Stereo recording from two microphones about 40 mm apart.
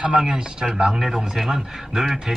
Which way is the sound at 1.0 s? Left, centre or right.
Centre.